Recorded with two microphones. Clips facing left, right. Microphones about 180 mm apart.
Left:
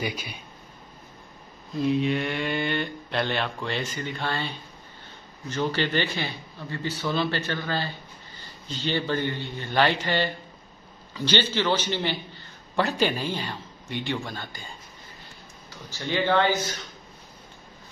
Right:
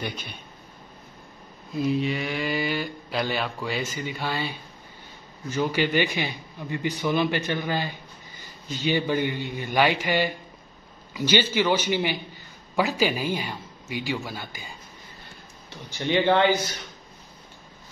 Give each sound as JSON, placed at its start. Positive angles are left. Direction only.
{"t": 0.0, "sound": "speech", "side_deg": 10}
{"t": 1.7, "sound": "a man's voice", "side_deg": 0}
{"t": 15.7, "sound": "speech", "side_deg": -20}